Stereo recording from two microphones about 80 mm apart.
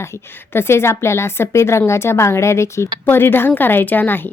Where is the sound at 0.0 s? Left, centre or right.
Left.